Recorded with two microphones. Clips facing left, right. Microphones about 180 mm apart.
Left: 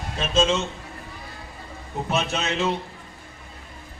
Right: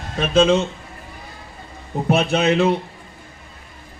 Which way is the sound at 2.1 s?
60° right (ahead or behind).